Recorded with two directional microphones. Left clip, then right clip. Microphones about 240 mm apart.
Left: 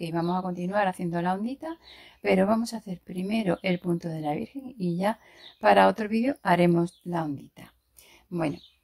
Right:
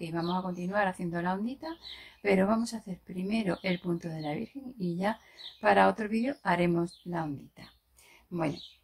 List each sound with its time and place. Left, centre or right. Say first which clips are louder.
0.0 s speech: left 4 dB; left